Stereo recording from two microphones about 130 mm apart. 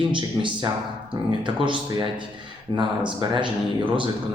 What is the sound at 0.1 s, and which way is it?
Speech, 40° right (ahead or behind).